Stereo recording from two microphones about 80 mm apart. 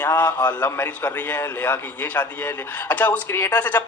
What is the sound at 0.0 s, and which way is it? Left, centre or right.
Speech, left.